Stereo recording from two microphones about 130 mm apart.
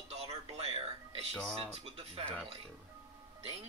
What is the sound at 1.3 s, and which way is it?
Speech, 5° left (ahead or behind).